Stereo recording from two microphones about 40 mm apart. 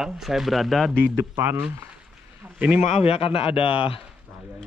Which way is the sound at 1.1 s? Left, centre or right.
Right.